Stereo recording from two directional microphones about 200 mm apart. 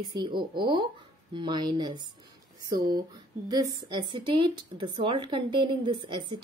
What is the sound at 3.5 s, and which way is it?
Speech, 20° right (ahead or behind).